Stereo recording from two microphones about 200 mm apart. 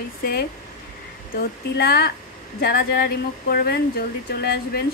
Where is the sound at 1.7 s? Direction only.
50° left (ahead or behind).